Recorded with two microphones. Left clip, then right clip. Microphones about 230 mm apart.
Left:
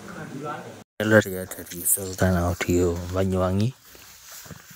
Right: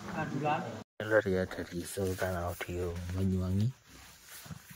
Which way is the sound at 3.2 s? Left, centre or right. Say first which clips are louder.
Left 14 dB; left.